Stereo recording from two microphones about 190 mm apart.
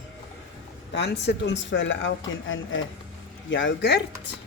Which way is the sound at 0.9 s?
65° left (ahead or behind).